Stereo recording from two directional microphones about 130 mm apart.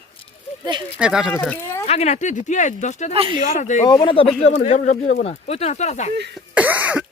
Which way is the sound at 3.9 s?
30° left (ahead or behind).